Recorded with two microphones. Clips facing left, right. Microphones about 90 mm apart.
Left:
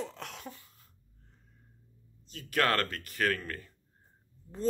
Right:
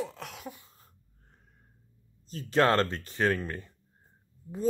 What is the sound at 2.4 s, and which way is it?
Speech, 25° right (ahead or behind).